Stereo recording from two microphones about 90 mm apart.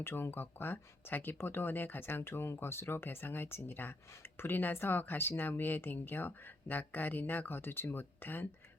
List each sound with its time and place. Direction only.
0.0 s speech: 25° left (ahead or behind)